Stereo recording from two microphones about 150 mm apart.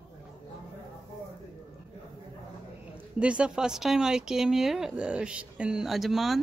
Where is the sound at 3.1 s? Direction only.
5° right (ahead or behind).